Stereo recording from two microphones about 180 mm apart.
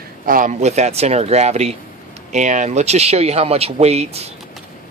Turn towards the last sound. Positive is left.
turn(degrees=-35)  # may be behind; listen again after turning